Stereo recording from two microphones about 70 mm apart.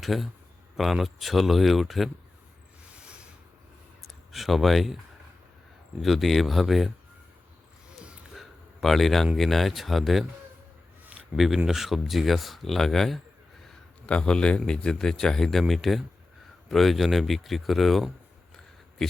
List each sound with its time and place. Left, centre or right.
0.0 s speech: centre
2.9 s a sound: centre
4.0 s speech: centre
6.0 s speech: centre
8.4 s speech: centre
11.3 s speech: centre
14.1 s speech: centre